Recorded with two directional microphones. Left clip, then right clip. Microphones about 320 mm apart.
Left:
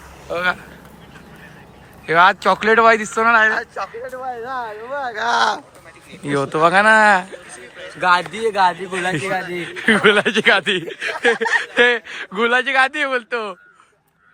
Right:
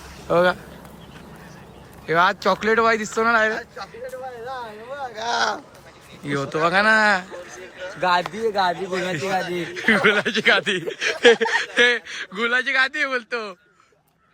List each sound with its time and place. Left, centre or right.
0.3 s speech: right
2.0 s speech: centre
5.1 s speech: centre
6.2 s speech: centre
8.0 s speech: left
8.9 s speech: centre